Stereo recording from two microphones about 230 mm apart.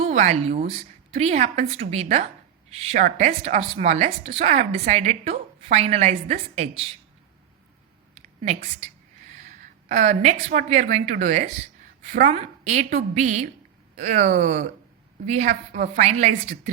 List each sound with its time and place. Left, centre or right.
0.0 s a woman's voice: right
8.1 s a sound: right
9.9 s a woman's voice: right